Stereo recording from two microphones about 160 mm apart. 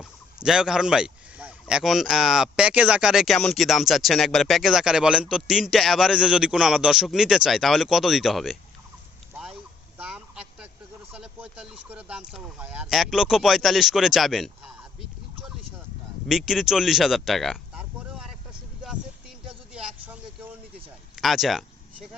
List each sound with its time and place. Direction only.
0.4 s speech: 5° right (ahead or behind)
10.0 s vehicle: 5° right (ahead or behind)
11.1 s speech: 5° right (ahead or behind)
16.3 s speech: 5° right (ahead or behind)
19.7 s vehicle: 5° right (ahead or behind)
21.2 s a sound: centre (ahead or behind)